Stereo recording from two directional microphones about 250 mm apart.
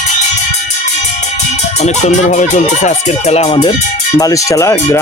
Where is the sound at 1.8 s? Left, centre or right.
Left.